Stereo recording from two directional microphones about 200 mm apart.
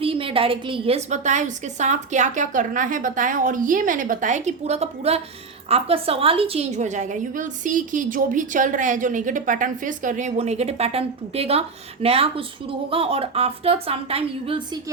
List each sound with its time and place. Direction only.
0.0 s a woman's voice: 25° right (ahead or behind)